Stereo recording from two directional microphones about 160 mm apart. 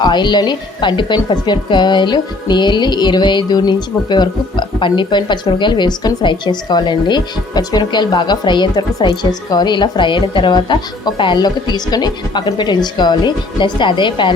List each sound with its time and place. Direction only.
0.0 s speech: 25° left (ahead or behind)